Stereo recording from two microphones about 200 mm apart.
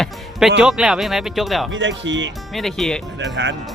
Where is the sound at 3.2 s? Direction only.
65° right (ahead or behind).